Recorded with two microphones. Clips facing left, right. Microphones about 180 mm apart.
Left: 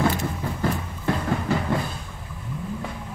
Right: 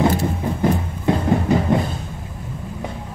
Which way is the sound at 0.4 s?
20° right (ahead or behind).